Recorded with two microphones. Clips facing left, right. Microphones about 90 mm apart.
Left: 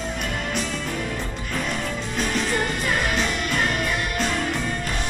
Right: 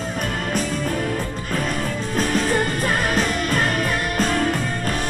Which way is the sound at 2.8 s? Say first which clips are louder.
Right 3 dB; 40° right (ahead or behind).